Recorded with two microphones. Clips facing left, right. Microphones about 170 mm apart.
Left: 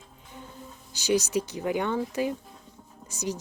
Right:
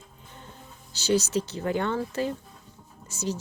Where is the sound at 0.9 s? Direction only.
15° left (ahead or behind).